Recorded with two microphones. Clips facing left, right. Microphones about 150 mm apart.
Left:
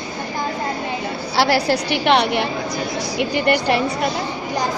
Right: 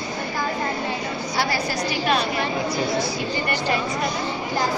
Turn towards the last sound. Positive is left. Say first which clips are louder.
# left 6 dB
turn(degrees=70)  # may be behind; listen again after turning